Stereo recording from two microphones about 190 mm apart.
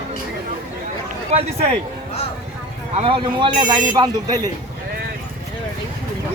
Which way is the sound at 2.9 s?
30° right (ahead or behind).